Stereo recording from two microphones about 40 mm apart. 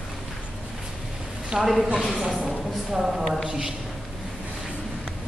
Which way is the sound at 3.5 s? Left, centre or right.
Centre.